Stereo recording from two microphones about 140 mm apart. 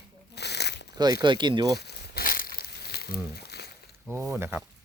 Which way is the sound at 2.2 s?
90° left.